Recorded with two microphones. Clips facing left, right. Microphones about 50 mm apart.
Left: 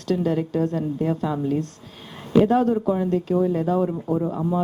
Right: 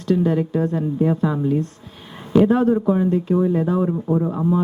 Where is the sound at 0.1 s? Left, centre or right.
Right.